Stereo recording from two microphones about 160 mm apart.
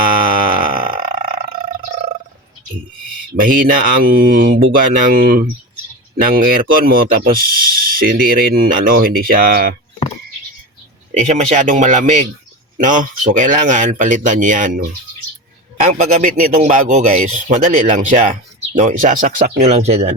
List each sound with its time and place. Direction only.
0.0 s a sound: 60° right (ahead or behind)
3.4 s speech: 60° right (ahead or behind)
11.2 s speech: 50° right (ahead or behind)
15.8 s speech: 50° right (ahead or behind)
19.5 s speech: 45° right (ahead or behind)